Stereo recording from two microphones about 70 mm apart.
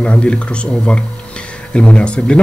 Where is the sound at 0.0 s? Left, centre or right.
Centre.